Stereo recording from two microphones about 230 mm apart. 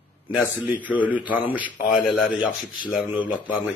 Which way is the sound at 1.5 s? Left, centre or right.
Centre.